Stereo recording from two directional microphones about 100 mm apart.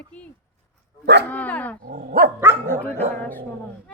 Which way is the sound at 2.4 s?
20° right (ahead or behind).